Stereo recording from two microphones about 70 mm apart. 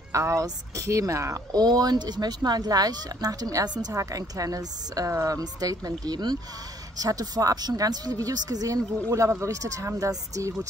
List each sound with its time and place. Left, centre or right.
0.1 s speech: right
7.0 s speech: right